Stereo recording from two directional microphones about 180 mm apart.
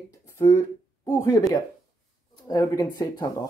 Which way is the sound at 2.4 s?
20° left (ahead or behind).